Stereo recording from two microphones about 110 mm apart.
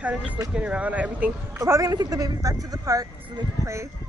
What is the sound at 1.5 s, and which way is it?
Speech, 25° right (ahead or behind).